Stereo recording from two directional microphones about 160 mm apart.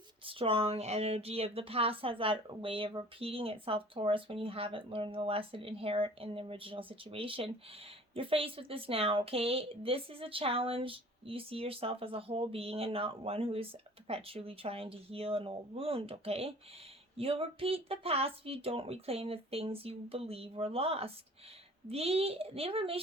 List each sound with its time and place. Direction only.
0.3 s speech: 35° right (ahead or behind)